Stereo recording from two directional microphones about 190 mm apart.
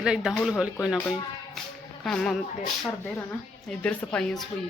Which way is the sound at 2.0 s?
Centre (ahead or behind).